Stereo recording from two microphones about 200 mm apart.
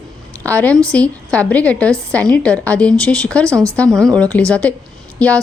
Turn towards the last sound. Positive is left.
turn(degrees=5)  # may be behind; listen again after turning